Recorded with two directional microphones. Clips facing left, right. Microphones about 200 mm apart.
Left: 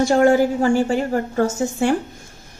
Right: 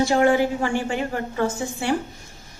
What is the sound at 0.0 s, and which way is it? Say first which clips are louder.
A woman's voice: left 4 dB; 45° left (ahead or behind).